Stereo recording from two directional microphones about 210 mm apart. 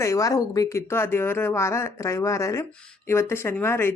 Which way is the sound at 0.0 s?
15° left (ahead or behind).